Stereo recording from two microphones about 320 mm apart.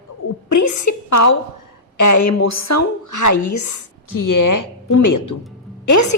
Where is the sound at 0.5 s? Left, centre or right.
Left.